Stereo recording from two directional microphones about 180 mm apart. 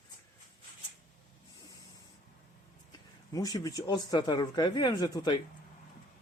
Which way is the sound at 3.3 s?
20° left (ahead or behind).